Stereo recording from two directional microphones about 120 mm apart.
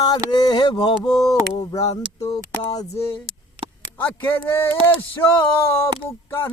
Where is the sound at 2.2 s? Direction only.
30° left (ahead or behind).